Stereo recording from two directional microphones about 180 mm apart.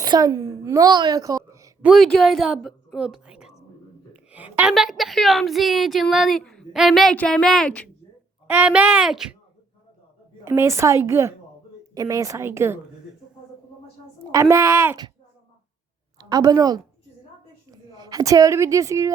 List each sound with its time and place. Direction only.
0.0 s a woman's voice: 20° right (ahead or behind)
1.9 s a woman's voice: centre (ahead or behind)
8.4 s a woman's voice: 10° right (ahead or behind)
10.4 s a woman's voice: 15° right (ahead or behind)
14.3 s a woman's voice: 15° right (ahead or behind)
16.1 s a woman's voice: 20° right (ahead or behind)